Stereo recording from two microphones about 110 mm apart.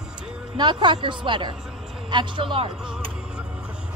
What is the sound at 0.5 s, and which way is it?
Speech, 45° right (ahead or behind).